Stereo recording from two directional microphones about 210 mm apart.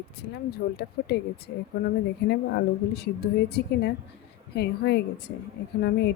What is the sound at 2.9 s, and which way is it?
Speech, 50° left (ahead or behind).